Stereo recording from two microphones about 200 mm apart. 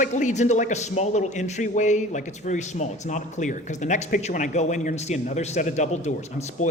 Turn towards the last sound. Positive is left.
turn(degrees=35)  # may be behind; listen again after turning